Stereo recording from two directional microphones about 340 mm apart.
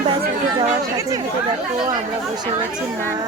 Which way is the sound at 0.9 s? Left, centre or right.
Centre.